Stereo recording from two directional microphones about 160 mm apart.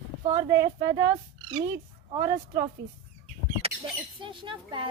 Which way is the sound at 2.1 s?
35° right (ahead or behind).